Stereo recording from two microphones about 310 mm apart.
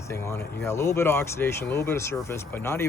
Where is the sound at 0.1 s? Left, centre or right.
Centre.